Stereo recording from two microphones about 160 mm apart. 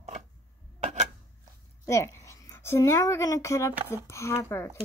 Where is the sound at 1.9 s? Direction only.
20° left (ahead or behind).